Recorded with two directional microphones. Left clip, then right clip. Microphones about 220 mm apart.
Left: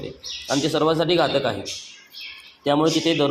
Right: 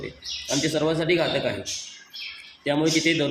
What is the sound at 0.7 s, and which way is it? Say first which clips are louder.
Speech: left 4 dB; 15° left (ahead or behind).